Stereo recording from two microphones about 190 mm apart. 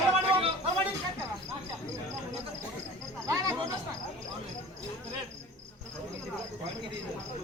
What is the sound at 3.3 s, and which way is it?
Cricket, 15° right (ahead or behind).